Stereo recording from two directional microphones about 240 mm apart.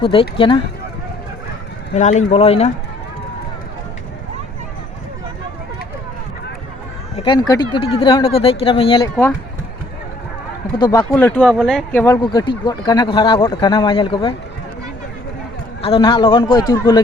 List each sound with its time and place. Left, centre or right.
0.0 s speech: left
2.0 s speech: left
7.2 s speech: centre
10.8 s speech: centre
15.8 s speech: left